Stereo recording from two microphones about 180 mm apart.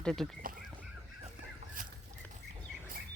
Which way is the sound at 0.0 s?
5° left (ahead or behind).